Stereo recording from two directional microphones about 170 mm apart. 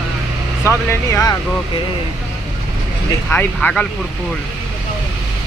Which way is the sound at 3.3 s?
10° left (ahead or behind).